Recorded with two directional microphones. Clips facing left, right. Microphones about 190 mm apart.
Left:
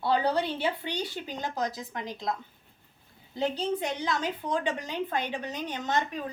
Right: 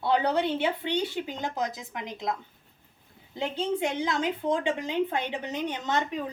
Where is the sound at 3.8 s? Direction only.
20° right (ahead or behind).